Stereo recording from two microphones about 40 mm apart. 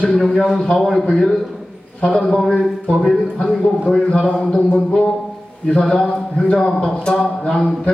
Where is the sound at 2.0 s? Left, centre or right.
Left.